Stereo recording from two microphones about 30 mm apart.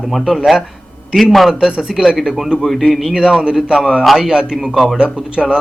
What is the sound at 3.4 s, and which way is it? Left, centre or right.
A man's voice, right.